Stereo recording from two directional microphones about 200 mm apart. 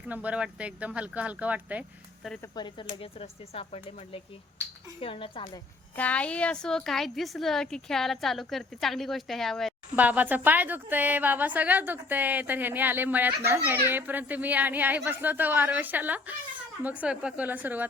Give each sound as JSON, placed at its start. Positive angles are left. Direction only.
{"t": 0.1, "sound": "speech", "side_deg": -5}
{"t": 2.6, "sound": "speech", "side_deg": 25}
{"t": 6.0, "sound": "a woman's voice", "side_deg": 5}